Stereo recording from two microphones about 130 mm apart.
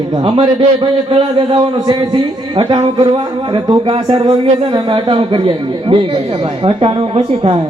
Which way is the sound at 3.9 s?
50° right (ahead or behind).